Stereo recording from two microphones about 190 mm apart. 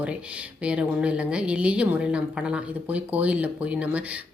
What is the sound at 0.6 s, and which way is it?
A woman's voice, 5° right (ahead or behind).